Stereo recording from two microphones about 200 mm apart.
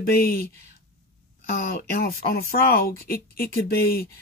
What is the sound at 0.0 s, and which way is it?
Speech, 50° left (ahead or behind).